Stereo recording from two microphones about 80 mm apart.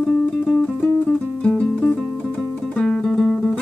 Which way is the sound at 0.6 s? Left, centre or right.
Centre.